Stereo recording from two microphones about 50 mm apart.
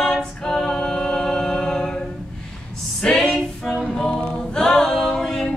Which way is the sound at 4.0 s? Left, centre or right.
Centre.